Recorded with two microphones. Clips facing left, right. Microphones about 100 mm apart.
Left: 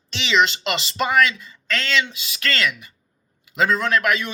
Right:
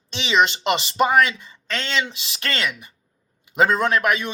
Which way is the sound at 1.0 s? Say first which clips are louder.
Right 1 dB; 30° right (ahead or behind).